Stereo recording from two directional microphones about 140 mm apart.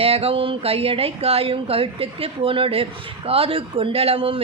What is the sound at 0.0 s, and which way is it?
A woman's voice, 45° right (ahead or behind).